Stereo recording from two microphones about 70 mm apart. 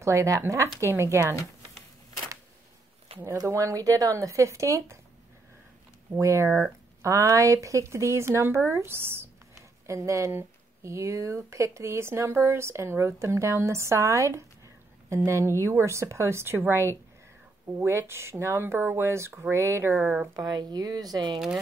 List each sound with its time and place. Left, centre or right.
0.0 s speech: right
3.4 s speech: right
6.1 s speech: right
20.3 s speech: right